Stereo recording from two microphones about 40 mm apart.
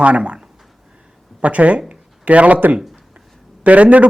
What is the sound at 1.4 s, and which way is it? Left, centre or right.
Speech, right.